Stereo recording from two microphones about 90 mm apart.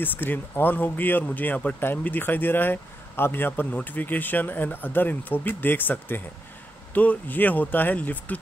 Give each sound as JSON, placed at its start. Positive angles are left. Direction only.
{"t": 0.0, "sound": "speech", "side_deg": 20}